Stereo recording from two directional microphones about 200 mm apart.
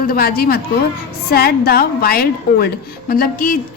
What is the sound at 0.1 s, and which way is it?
A woman's voice, 50° left (ahead or behind).